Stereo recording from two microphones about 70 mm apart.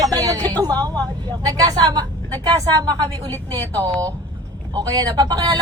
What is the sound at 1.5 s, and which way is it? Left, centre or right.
Speech, right.